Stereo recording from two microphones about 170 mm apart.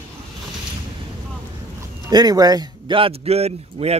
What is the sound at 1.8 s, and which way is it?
A man's voice, 25° right (ahead or behind).